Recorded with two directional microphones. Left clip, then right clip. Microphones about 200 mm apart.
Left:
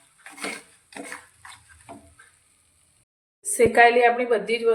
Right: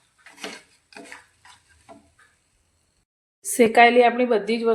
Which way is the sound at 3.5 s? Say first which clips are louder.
Right 2 dB; 45° right (ahead or behind).